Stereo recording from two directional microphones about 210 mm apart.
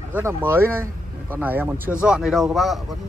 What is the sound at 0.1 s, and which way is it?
Speech, 10° right (ahead or behind).